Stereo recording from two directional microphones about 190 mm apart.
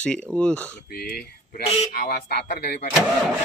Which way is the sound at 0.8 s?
50° left (ahead or behind).